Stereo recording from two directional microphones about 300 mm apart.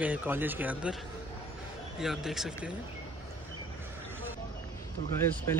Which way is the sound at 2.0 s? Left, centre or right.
Centre.